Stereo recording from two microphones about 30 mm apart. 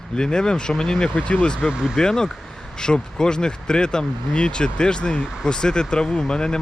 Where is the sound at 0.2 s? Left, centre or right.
Left.